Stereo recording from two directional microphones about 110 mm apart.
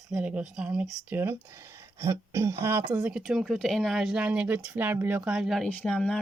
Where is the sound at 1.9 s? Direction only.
25° right (ahead or behind); by 5.7 s centre (ahead or behind).